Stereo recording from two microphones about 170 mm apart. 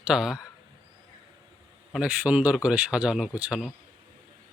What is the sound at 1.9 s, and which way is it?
Speech, 5° right (ahead or behind).